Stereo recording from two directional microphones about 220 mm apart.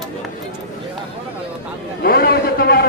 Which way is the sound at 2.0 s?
45° left (ahead or behind).